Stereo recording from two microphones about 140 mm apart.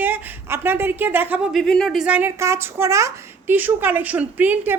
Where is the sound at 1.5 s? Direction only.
5° left (ahead or behind).